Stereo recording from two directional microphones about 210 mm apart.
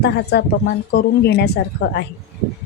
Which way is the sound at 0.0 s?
50° left (ahead or behind).